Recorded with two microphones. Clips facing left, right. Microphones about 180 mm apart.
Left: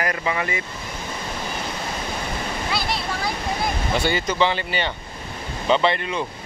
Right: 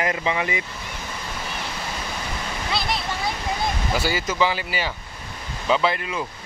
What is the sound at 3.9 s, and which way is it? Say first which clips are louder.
Speech: left 2 dB; 5° right (ahead or behind).